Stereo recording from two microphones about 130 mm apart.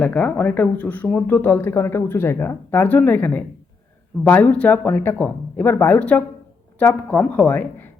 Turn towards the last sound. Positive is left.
turn(degrees=15)  # may be behind; listen again after turning